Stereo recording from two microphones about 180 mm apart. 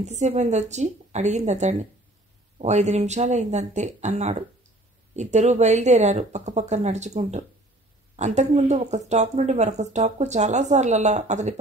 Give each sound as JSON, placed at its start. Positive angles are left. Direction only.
{"t": 0.0, "sound": "speech", "side_deg": -40}